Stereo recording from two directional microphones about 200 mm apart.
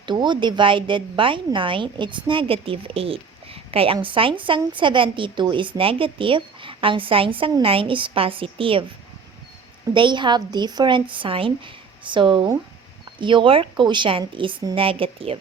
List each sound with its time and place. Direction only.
0.0 s speech: 20° right (ahead or behind)
9.9 s speech: 25° right (ahead or behind)